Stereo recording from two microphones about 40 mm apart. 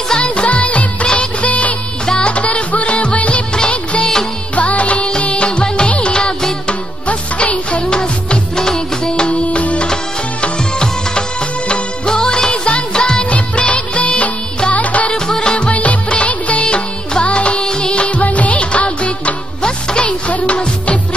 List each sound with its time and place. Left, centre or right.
0.2 s music: left
1.0 s music of bollywood: left
2.0 s music: left
6.1 s music: centre
7.1 s music: left
7.9 s music: left
11.7 s music: centre
12.9 s music of bollywood: centre
14.7 s music: left
15.0 s music: centre
15.7 s music: left
20.2 s music: left